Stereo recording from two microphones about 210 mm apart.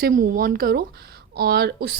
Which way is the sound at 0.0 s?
45° right (ahead or behind).